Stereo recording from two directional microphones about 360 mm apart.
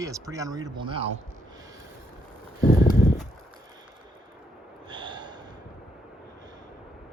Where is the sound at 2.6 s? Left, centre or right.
Left.